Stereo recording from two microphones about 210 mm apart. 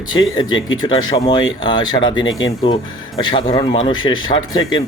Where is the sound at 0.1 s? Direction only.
20° left (ahead or behind).